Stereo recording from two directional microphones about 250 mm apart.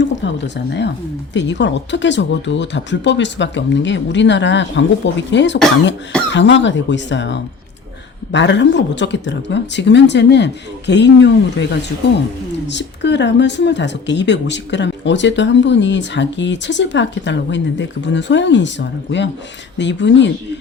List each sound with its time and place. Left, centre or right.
0.0 s speech: left
12.6 s speech: left